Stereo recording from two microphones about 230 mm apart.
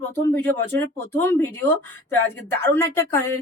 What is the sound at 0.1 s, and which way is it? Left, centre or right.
Speech, centre.